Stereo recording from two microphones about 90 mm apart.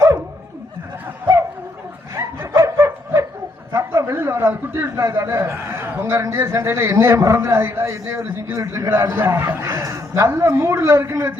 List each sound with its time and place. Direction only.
2.5 s a sound: 35° right (ahead or behind)
3.8 s a man's voice: 30° right (ahead or behind)
8.9 s speech: 25° right (ahead or behind)
9.6 s a man's voice: 40° right (ahead or behind)